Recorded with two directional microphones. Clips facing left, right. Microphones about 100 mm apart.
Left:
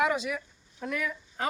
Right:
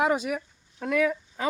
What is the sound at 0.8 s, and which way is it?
Speech, 90° right.